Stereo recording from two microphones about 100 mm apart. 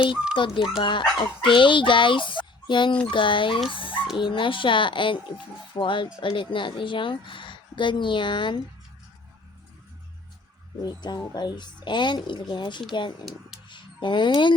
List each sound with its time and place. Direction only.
0.3 s speech: 55° left (ahead or behind)
10.8 s speech: 45° left (ahead or behind)
13.7 s a sound: 50° left (ahead or behind)